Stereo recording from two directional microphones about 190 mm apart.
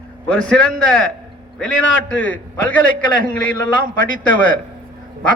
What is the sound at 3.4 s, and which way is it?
A man's voice, 45° right (ahead or behind).